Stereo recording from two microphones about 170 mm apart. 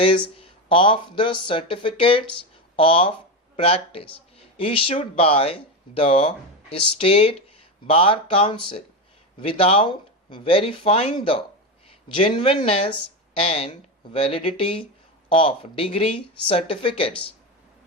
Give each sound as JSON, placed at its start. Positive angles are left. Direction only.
{"t": 0.3, "sound": "speech", "side_deg": 30}